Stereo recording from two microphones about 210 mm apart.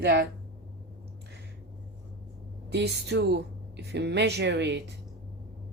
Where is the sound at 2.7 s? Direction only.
55° right (ahead or behind).